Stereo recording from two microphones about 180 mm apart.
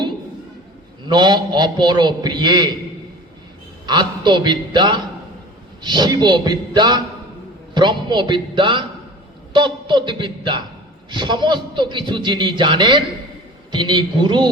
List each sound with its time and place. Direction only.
1.0 s a man's voice: 25° right (ahead or behind)
3.8 s a man's voice: 25° right (ahead or behind)